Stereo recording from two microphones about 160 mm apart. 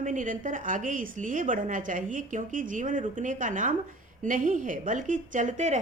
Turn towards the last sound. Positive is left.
turn(degrees=-45)  # may be behind; listen again after turning